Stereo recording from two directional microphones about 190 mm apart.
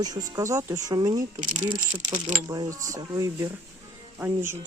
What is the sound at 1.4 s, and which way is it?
Speech, 40° right (ahead or behind).